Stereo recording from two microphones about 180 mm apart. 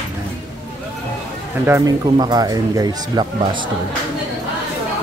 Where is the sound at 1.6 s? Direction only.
15° right (ahead or behind).